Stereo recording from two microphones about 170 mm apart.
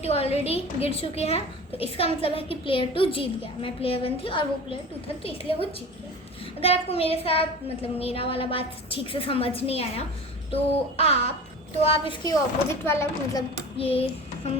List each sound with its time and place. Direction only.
0.0 s a woman's voice: 35° left (ahead or behind)
12.8 s a child's voice: 15° left (ahead or behind)
13.7 s child singing: 35° left (ahead or behind)